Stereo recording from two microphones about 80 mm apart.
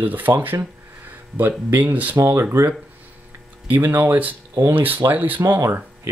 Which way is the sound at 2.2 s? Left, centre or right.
Right.